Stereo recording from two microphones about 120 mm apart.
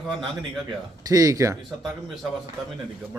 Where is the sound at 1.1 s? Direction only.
30° right (ahead or behind).